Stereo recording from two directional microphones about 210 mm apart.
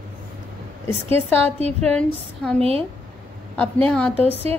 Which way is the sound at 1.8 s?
5° left (ahead or behind).